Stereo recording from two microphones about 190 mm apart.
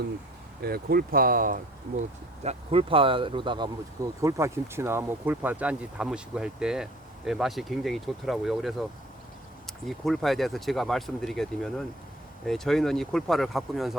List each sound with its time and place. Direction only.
0.6 s speech: 55° right (ahead or behind)
2.4 s speech: 30° right (ahead or behind); by 13.9 s centre (ahead or behind)